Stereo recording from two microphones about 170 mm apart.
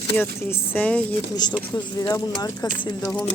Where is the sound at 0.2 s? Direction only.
15° left (ahead or behind).